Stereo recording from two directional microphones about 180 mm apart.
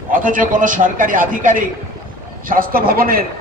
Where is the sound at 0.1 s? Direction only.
50° right (ahead or behind).